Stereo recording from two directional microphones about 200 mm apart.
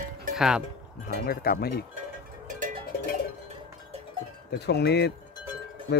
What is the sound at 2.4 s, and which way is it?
Music, 40° right (ahead or behind).